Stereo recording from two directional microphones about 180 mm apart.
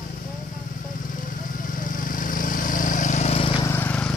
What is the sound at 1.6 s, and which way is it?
Vehicle, 50° left (ahead or behind).